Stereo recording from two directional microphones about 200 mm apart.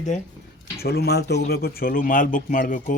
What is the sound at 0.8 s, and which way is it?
A man's voice, 55° left (ahead or behind).